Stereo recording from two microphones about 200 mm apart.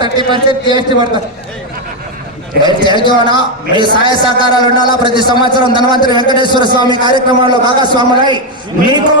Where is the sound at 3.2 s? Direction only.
25° right (ahead or behind).